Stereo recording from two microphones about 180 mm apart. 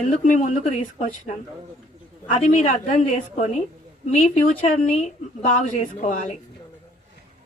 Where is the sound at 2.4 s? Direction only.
40° left (ahead or behind).